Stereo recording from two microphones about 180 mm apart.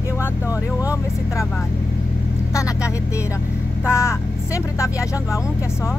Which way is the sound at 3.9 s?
15° left (ahead or behind).